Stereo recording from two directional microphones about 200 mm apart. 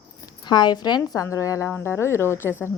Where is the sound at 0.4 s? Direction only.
20° left (ahead or behind).